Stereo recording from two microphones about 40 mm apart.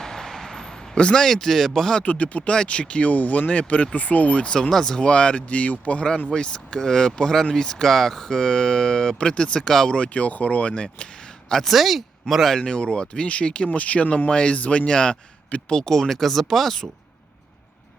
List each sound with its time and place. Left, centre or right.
0.0 s a sound: centre
1.1 s speech: centre
2.0 s speech: left
2.5 s speech: left
4.7 s speech: centre
4.9 s speech: left
6.3 s speech: left
9.6 s speech: centre
9.9 s speech: left
11.0 s a sound: centre
11.6 s speech: centre
12.5 s speech: left
14.8 s speech: left